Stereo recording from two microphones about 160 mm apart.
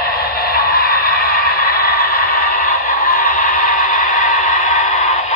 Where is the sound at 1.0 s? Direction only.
65° left (ahead or behind).